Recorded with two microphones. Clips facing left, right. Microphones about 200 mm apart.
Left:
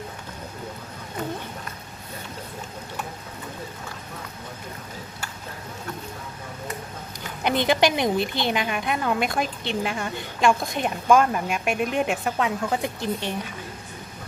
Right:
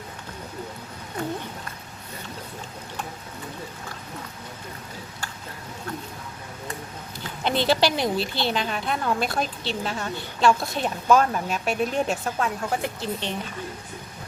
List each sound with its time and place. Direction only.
7.4 s a woman's voice: 15° left (ahead or behind)